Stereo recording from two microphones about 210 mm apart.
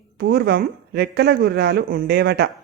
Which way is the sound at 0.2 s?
50° right (ahead or behind).